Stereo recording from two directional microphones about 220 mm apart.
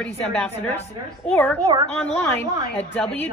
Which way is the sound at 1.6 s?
20° right (ahead or behind).